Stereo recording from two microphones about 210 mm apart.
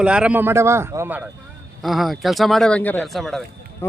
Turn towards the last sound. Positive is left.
turn(degrees=0)  # may be behind; listen again after turning